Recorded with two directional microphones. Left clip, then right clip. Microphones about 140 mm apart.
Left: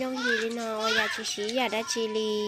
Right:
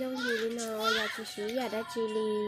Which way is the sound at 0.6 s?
Centre (ahead or behind).